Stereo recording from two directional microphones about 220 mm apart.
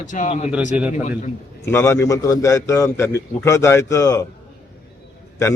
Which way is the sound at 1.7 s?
10° left (ahead or behind).